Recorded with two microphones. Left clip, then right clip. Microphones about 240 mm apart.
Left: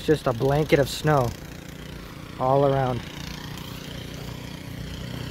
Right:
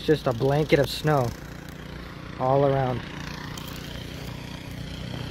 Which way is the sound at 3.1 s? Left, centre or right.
Left.